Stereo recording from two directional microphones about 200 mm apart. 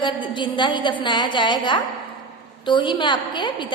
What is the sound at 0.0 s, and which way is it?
A woman's voice, 25° left (ahead or behind).